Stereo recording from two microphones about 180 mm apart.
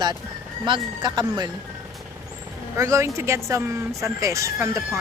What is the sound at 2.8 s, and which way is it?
A woman's voice, 15° right (ahead or behind).